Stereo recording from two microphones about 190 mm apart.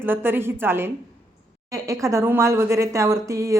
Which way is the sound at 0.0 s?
10° right (ahead or behind).